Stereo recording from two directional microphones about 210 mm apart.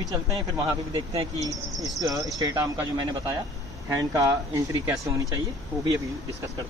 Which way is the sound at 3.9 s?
15° right (ahead or behind).